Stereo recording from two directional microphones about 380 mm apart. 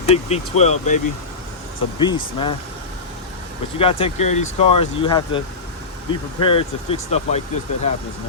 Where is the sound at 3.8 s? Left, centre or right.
Centre.